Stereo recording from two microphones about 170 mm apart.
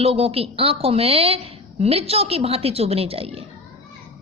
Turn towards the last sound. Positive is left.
turn(degrees=-35)  # may be behind; listen again after turning